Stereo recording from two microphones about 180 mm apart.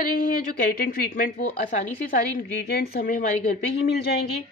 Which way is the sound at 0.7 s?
55° left (ahead or behind).